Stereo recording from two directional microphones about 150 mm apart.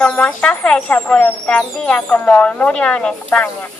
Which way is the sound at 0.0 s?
5° left (ahead or behind).